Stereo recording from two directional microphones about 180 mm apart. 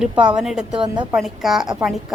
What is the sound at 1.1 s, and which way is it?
Speech, centre (ahead or behind).